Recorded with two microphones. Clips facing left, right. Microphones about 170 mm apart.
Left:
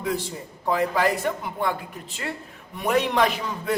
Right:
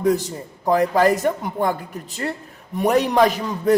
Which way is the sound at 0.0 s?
40° right (ahead or behind).